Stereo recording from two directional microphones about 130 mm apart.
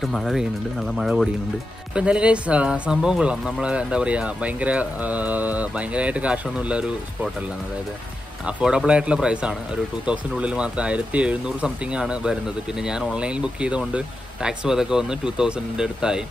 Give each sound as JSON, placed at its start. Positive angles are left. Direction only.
{"t": 0.0, "sound": "speech", "side_deg": 0}
{"t": 8.5, "sound": "speech", "side_deg": -10}